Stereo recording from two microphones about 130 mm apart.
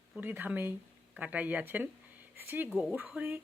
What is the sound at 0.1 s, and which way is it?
Speech, 15° right (ahead or behind).